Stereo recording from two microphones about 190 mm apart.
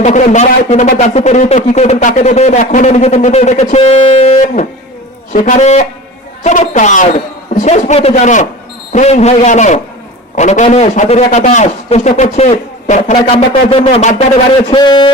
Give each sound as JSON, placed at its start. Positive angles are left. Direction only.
{"t": 0.0, "sound": "a man's voice", "side_deg": 40}
{"t": 14.7, "sound": "speech", "side_deg": 25}